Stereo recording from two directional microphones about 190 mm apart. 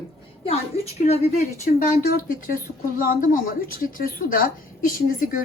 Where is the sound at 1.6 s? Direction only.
45° left (ahead or behind).